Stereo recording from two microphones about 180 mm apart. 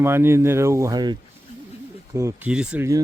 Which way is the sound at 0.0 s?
15° right (ahead or behind).